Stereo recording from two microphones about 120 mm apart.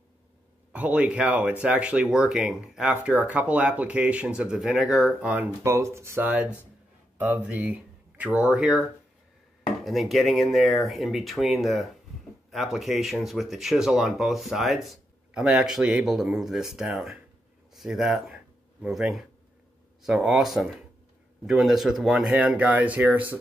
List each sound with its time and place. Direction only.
0.7 s speech: 10° right (ahead or behind)
5.6 s speech: 25° right (ahead or behind); by 8.7 s 10° right (ahead or behind)
9.8 s speech: centre (ahead or behind)